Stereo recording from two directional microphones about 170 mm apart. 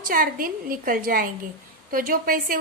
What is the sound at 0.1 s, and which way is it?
A woman's voice, 55° right (ahead or behind).